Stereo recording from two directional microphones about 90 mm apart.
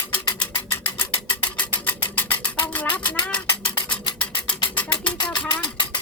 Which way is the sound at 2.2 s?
20° left (ahead or behind).